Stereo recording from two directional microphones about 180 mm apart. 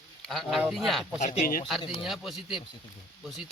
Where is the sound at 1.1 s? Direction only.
40° left (ahead or behind).